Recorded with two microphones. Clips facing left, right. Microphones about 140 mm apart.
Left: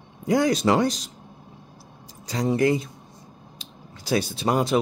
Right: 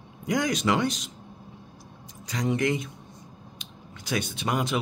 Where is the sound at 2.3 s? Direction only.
35° left (ahead or behind).